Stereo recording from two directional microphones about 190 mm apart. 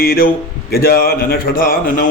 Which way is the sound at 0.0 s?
50° left (ahead or behind).